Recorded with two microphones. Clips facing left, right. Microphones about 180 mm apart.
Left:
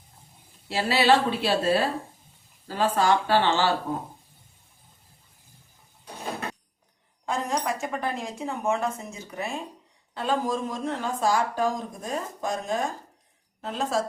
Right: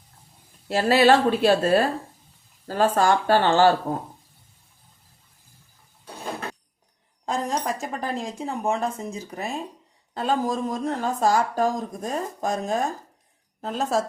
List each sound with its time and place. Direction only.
0.7 s speech: 45° right (ahead or behind)
7.3 s speech: 35° right (ahead or behind)